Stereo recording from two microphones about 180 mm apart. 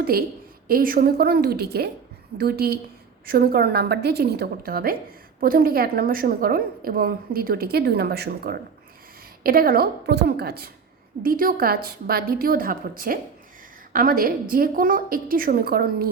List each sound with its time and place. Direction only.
0.0 s a woman's voice: 55° right (ahead or behind)